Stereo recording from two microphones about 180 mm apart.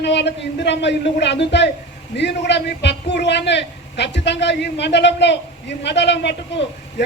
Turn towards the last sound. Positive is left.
turn(degrees=70)  # may be behind; listen again after turning